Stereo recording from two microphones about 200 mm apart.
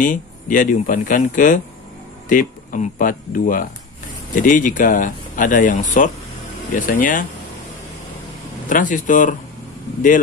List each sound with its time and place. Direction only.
0.0 s speech: 40° left (ahead or behind)
8.6 s speech: 40° left (ahead or behind)